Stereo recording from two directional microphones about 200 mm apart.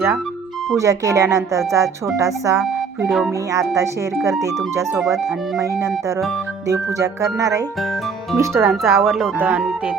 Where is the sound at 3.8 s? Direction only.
15° right (ahead or behind).